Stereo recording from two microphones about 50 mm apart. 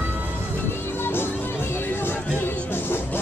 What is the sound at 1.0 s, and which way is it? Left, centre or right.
Music, left.